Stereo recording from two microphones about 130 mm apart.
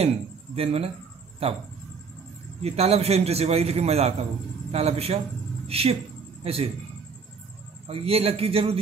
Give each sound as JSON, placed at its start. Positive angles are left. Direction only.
{"t": 0.6, "sound": "a man's voice", "side_deg": -50}
{"t": 2.6, "sound": "a man's voice", "side_deg": -50}
{"t": 7.9, "sound": "a man's voice", "side_deg": -50}